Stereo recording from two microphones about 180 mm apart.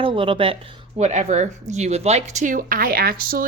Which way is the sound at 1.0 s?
40° right (ahead or behind).